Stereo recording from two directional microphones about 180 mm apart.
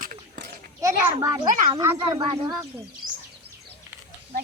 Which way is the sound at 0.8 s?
15° right (ahead or behind).